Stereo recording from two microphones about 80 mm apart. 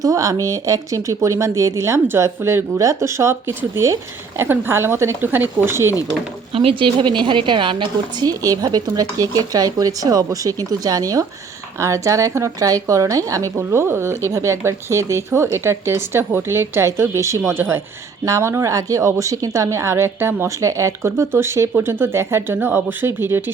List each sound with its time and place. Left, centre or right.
0.0 s a woman's voice: right
6.7 s a woman's voice: right
8.4 s a woman's voice: right